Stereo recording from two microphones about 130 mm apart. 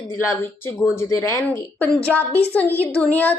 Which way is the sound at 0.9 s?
20° left (ahead or behind).